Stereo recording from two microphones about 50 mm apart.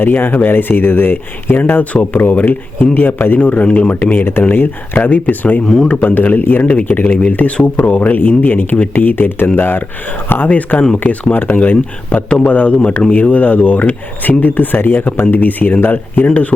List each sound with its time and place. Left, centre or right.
0.0 s speech: left
3.4 s speech: left
5.0 s speech: left
10.5 s speech: left
16.2 s speech: left